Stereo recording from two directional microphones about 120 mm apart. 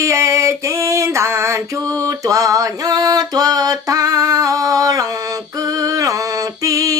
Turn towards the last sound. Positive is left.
turn(degrees=-30)  # may be behind; listen again after turning